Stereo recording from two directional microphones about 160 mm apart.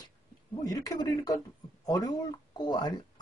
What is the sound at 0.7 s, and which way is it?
Speech, 25° left (ahead or behind).